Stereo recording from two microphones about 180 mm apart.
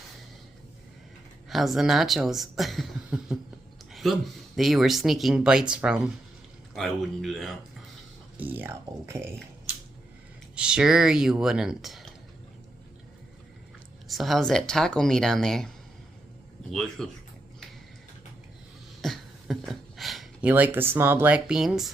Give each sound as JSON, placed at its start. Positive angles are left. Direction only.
{"t": 1.5, "sound": "speech", "side_deg": 0}
{"t": 8.4, "sound": "speech", "side_deg": -10}
{"t": 10.5, "sound": "speech", "side_deg": -5}
{"t": 14.1, "sound": "speech", "side_deg": 0}
{"t": 16.7, "sound": "speech", "side_deg": 0}
{"t": 19.0, "sound": "a sound", "side_deg": 0}